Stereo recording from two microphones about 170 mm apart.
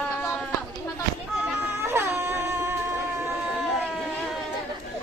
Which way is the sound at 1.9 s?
15° right (ahead or behind).